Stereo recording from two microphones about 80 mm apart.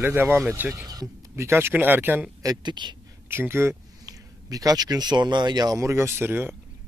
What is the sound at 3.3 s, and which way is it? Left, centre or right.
Speech, right.